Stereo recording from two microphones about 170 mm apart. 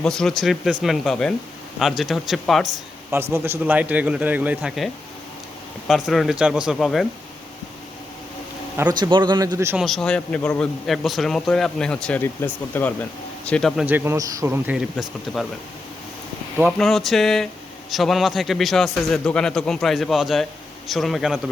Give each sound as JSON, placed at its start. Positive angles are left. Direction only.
{"t": 0.0, "sound": "a man's voice", "side_deg": 5}
{"t": 3.3, "sound": "speech", "side_deg": -15}
{"t": 5.9, "sound": "a man's voice", "side_deg": 0}
{"t": 8.9, "sound": "a man's voice", "side_deg": -25}
{"t": 9.7, "sound": "a man's voice", "side_deg": 0}
{"t": 13.8, "sound": "speech", "side_deg": -10}
{"t": 15.3, "sound": "a man's voice", "side_deg": 0}
{"t": 16.7, "sound": "a man's voice", "side_deg": 0}